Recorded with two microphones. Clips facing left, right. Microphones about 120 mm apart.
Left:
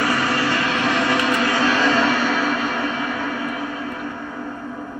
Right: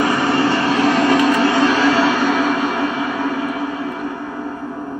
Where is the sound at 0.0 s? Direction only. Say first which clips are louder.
Right 5 dB; 25° right (ahead or behind).